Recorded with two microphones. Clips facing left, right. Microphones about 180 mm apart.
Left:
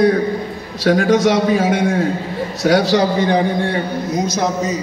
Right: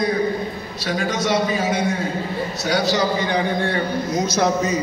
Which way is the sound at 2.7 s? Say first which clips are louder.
Left 6 dB; 90° left.